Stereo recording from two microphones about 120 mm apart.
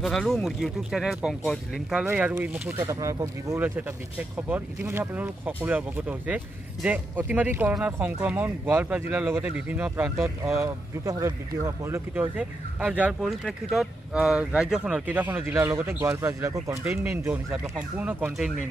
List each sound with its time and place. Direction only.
0.0 s speech: 5° left (ahead or behind)
13.2 s speech: centre (ahead or behind)